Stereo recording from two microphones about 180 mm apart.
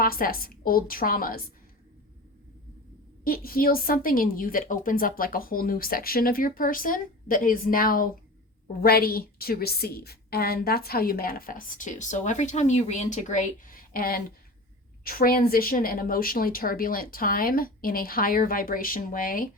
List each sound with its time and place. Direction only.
0.0 s a woman's voice: 55° left (ahead or behind)
3.2 s a woman's voice: 55° left (ahead or behind)